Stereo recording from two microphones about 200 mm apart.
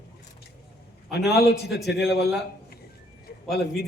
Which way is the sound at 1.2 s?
55° left (ahead or behind).